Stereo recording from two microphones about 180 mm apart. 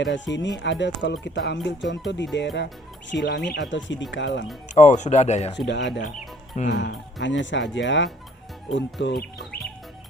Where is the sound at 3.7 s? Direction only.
90° left.